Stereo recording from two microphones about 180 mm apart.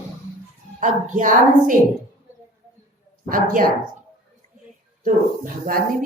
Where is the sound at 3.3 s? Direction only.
50° right (ahead or behind).